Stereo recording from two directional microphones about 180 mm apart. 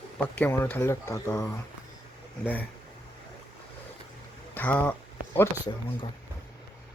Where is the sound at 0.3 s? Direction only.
10° left (ahead or behind).